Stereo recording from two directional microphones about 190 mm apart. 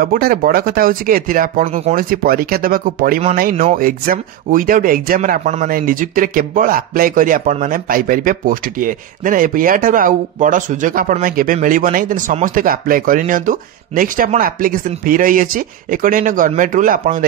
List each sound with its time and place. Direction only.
0.0 s speech: 50° right (ahead or behind)